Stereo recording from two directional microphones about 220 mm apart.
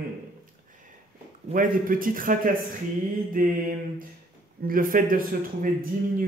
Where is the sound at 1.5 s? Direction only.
40° right (ahead or behind).